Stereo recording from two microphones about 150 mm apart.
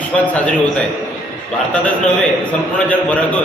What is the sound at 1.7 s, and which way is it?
A man's voice, 10° left (ahead or behind).